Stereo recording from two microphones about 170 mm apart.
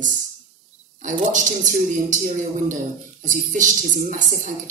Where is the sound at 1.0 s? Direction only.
50° right (ahead or behind).